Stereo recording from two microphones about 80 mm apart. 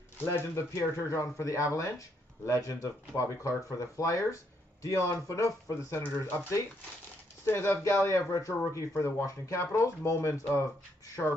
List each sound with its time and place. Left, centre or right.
0.2 s speech: left
9.6 s speech: left
10.0 s speech: left